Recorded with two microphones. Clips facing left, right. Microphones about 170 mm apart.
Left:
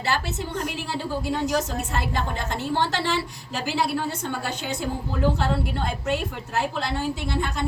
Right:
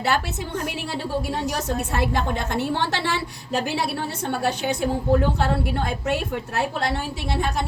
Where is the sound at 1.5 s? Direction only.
65° right (ahead or behind).